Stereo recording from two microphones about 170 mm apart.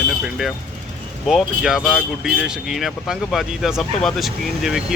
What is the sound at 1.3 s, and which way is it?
Speech, 5° right (ahead or behind).